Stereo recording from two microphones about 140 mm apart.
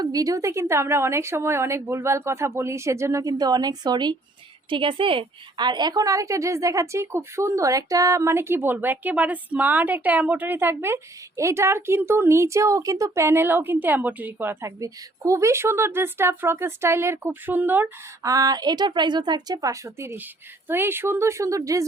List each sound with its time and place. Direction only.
0.0 s a woman's voice: 25° right (ahead or behind)
18.2 s a woman's voice: 25° right (ahead or behind)